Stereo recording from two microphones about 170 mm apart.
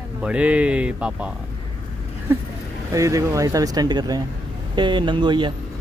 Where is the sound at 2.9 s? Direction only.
20° right (ahead or behind).